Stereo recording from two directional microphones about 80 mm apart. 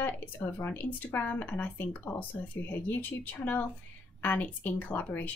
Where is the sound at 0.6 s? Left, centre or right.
Left.